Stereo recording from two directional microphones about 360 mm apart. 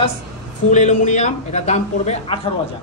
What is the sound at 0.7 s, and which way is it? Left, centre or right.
A man's voice, centre.